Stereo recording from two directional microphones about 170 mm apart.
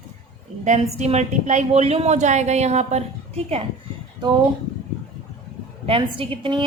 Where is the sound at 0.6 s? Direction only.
45° right (ahead or behind).